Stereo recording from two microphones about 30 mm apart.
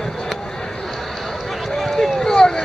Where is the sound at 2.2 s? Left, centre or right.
Left.